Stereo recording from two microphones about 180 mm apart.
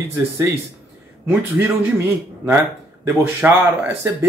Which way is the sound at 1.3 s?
15° right (ahead or behind).